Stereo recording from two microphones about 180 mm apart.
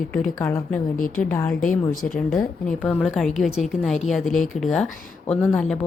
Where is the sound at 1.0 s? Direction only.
50° left (ahead or behind).